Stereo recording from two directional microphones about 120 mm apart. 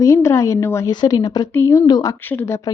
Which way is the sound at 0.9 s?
35° left (ahead or behind).